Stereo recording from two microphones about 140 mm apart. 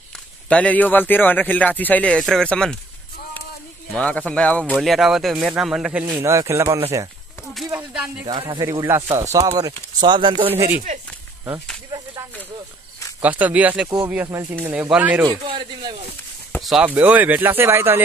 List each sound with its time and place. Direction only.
0.1 s a man's voice: 10° left (ahead or behind)
3.9 s a man's voice: 5° left (ahead or behind)
6.1 s speech: 20° right (ahead or behind)
7.7 s a sound: 10° right (ahead or behind)
8.4 s speech: 30° right (ahead or behind)
13.2 s speech: 10° right (ahead or behind)
15.2 s speech: 35° right (ahead or behind)
16.8 s speech: 10° right (ahead or behind)